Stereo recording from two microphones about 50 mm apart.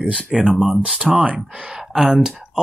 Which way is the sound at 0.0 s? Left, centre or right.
Centre.